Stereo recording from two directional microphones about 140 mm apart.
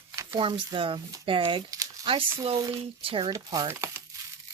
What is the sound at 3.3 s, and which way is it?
Speech, 25° right (ahead or behind).